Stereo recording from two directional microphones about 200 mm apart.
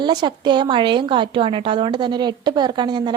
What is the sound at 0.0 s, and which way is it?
A woman's voice, 20° right (ahead or behind).